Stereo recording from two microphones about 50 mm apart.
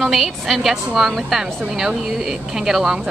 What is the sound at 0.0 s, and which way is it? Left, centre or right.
A woman's voice, centre.